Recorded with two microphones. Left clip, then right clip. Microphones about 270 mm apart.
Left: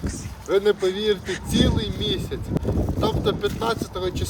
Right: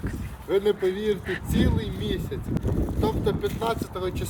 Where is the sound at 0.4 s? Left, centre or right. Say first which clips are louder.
Left 3 dB; centre.